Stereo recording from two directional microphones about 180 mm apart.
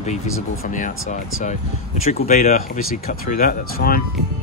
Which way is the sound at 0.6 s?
50° left (ahead or behind).